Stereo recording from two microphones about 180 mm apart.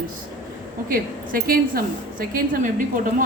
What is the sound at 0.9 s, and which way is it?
A woman's voice, 50° right (ahead or behind).